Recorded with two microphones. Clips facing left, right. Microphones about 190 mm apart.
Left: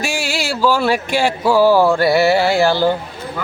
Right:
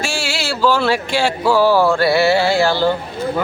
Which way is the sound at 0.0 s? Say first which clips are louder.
Left 1 dB; 15° left (ahead or behind).